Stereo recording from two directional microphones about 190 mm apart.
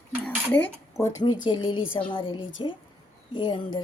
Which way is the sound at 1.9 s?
25° left (ahead or behind).